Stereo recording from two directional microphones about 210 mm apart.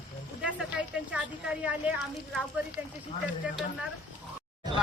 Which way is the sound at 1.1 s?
5° right (ahead or behind).